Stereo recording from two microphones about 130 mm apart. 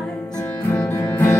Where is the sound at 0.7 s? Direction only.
20° left (ahead or behind).